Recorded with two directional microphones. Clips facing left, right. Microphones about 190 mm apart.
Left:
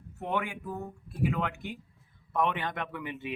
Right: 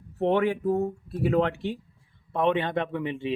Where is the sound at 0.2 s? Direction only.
35° right (ahead or behind).